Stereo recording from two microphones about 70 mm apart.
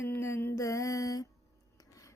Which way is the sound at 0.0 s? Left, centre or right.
Left.